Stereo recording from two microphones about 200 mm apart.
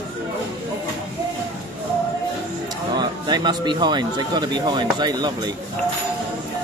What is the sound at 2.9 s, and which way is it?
A man's voice, 20° right (ahead or behind).